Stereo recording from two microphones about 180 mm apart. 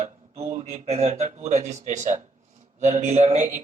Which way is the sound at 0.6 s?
35° right (ahead or behind).